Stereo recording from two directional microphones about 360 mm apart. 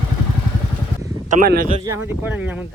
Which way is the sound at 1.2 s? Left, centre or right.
Right.